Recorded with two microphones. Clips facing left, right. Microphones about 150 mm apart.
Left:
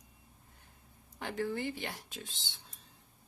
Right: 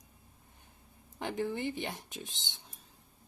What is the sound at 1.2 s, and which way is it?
Speech, 20° right (ahead or behind).